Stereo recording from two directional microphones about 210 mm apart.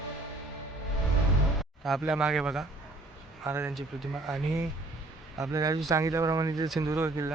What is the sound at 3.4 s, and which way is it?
Speech, 10° right (ahead or behind).